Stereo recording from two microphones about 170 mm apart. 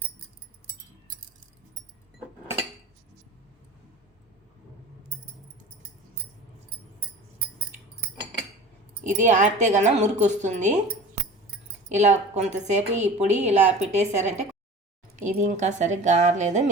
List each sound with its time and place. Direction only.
9.0 s speech: 45° right (ahead or behind)
11.9 s a woman's voice: 40° right (ahead or behind)